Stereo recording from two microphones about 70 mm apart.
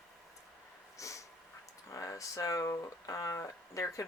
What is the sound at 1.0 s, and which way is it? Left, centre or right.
Dog, left.